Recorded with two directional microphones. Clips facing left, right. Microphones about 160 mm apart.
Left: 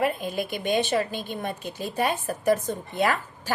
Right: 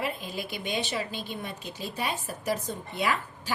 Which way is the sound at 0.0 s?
50° left (ahead or behind).